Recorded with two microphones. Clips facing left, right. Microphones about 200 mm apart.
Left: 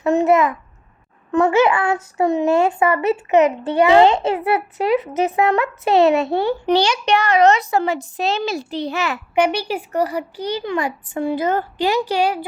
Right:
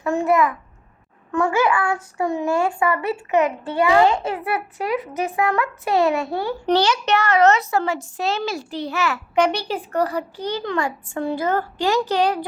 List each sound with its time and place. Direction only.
0.0 s a sound: 20° left (ahead or behind)
1.3 s a child's voice: 20° left (ahead or behind)
6.7 s a child's voice: 15° left (ahead or behind)